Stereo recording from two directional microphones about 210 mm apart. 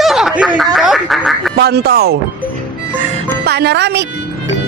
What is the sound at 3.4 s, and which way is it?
Speech, 50° right (ahead or behind).